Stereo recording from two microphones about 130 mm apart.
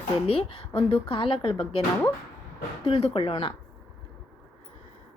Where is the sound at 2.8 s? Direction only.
45° left (ahead or behind).